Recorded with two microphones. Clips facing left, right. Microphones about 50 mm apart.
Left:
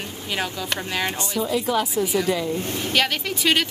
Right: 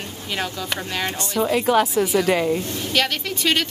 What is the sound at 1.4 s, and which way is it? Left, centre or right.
Speech, right.